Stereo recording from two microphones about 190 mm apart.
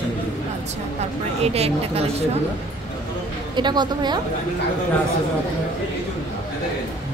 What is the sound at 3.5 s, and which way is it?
Speech, 25° right (ahead or behind).